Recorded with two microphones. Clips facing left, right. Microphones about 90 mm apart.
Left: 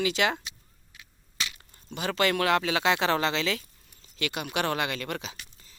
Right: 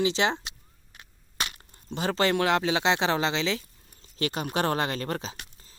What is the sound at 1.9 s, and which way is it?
Speech, 30° right (ahead or behind).